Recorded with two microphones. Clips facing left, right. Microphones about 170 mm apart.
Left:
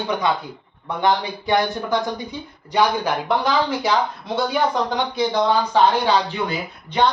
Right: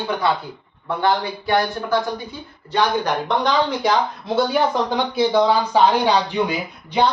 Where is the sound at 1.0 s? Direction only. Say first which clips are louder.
Even; 20° left (ahead or behind); by 7.0 s 10° right (ahead or behind).